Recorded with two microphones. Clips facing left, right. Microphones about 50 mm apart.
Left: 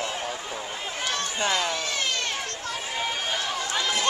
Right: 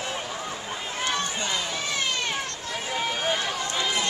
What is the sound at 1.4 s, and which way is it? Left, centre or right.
Speech, left.